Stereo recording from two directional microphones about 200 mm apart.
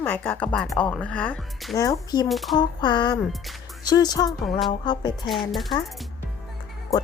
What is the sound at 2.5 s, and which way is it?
Speech, 20° left (ahead or behind).